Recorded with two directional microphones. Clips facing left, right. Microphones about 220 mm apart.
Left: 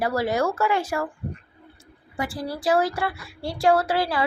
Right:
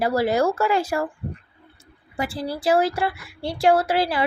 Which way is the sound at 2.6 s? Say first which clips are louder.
Right 2 dB; 25° right (ahead or behind).